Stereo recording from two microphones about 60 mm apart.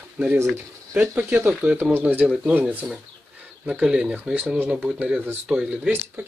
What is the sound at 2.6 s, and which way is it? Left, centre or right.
Speech, right.